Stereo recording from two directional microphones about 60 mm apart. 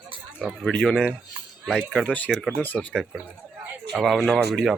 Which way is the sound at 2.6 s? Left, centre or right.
Left.